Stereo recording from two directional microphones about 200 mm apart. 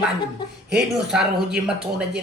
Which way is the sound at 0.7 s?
5° right (ahead or behind).